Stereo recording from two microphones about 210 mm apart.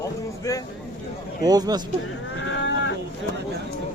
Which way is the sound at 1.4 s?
20° right (ahead or behind).